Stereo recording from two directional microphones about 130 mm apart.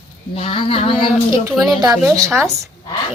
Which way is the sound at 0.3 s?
50° left (ahead or behind).